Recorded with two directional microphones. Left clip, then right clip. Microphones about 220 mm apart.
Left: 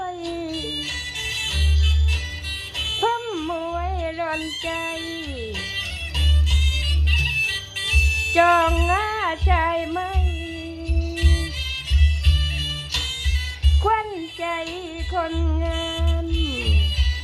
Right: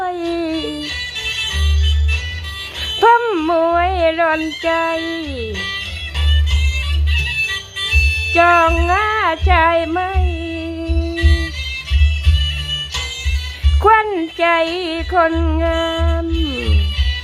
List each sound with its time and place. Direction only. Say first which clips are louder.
0.0 s music: right 9 dB; 10° right (ahead or behind)
3.0 s music: right 14 dB; 15° right (ahead or behind)
6.7 s music: right 1 dB; 45° left (ahead or behind)
8.3 s female singing: right 5 dB; centre (ahead or behind)
13.8 s music: right 10 dB; 15° right (ahead or behind)